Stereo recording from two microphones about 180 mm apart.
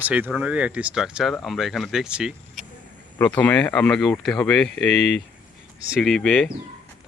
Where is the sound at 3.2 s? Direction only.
10° left (ahead or behind).